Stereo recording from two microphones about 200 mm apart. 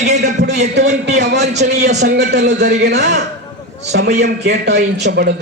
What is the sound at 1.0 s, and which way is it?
A man's voice, 60° right (ahead or behind).